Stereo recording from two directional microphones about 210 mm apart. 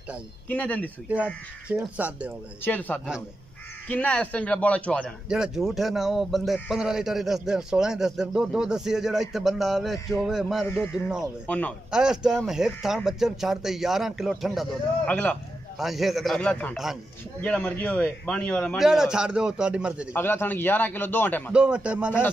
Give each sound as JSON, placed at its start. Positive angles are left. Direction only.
{"t": 0.5, "sound": "a man's voice", "side_deg": 5}
{"t": 1.0, "sound": "speech", "side_deg": -5}
{"t": 2.6, "sound": "a man's voice", "side_deg": 10}
{"t": 20.1, "sound": "a man's voice", "side_deg": 10}
{"t": 21.5, "sound": "speech", "side_deg": -5}